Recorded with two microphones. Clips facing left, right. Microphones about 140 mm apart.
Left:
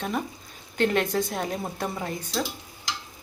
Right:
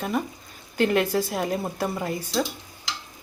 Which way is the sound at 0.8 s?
Centre (ahead or behind).